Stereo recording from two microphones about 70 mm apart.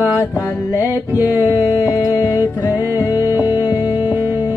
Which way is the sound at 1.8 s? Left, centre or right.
Left.